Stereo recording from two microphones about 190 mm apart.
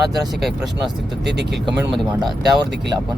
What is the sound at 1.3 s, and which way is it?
Speech, 60° right (ahead or behind).